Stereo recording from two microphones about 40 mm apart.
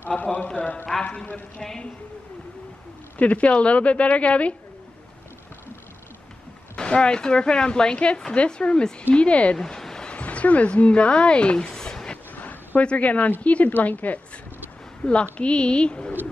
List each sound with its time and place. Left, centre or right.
0.1 s a woman's voice: left
0.9 s a man's voice: centre
3.2 s a woman's voice: left
6.7 s a woman's voice: left
9.6 s a sound: centre
10.0 s speech: left
11.6 s a sound: centre
12.4 s a sound: left
12.8 s a woman's voice: left
15.0 s speech: left